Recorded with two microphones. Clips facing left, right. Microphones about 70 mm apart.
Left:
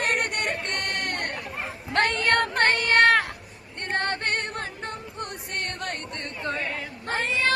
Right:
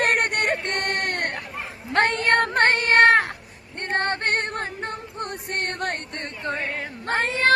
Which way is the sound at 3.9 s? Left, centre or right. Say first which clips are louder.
Right 3 dB; right.